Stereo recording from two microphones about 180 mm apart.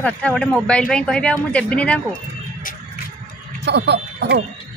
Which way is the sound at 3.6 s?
70° right (ahead or behind).